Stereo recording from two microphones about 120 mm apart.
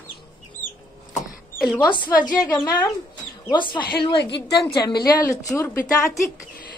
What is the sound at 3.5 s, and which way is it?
A woman's voice, 40° left (ahead or behind).